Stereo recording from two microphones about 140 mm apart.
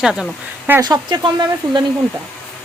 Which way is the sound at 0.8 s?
30° right (ahead or behind).